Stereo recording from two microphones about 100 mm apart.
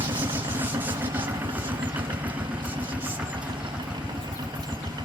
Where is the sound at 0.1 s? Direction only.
20° right (ahead or behind).